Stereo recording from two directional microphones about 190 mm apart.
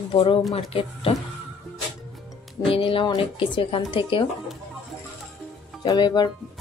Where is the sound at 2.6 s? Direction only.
30° left (ahead or behind).